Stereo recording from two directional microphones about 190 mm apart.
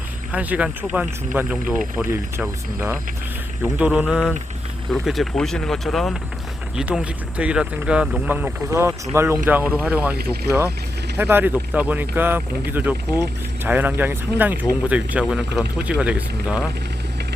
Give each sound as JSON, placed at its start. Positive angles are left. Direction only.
{"t": 0.3, "sound": "speech", "side_deg": -5}
{"t": 11.2, "sound": "speech", "side_deg": -10}